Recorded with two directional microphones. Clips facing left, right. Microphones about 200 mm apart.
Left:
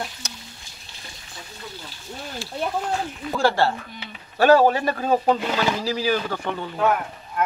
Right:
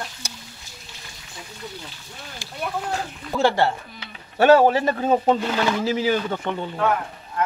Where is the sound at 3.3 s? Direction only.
20° right (ahead or behind).